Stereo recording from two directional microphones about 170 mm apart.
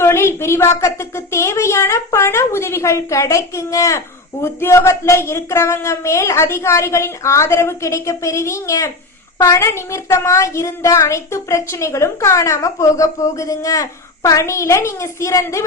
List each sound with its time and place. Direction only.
0.0 s a child's voice: 15° left (ahead or behind)